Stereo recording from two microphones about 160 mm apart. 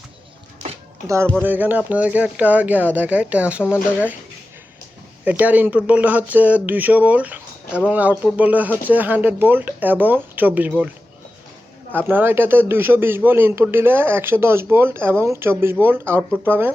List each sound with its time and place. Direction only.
1.0 s a man's voice: 15° right (ahead or behind)
5.2 s a man's voice: 10° right (ahead or behind)